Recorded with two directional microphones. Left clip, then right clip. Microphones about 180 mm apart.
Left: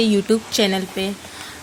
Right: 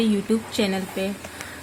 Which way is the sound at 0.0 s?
45° left (ahead or behind).